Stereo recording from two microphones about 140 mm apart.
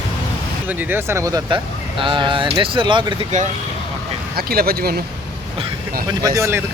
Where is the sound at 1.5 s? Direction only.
35° right (ahead or behind).